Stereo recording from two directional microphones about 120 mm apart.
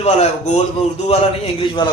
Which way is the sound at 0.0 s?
60° left (ahead or behind).